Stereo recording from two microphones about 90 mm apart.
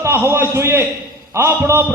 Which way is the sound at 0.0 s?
30° right (ahead or behind).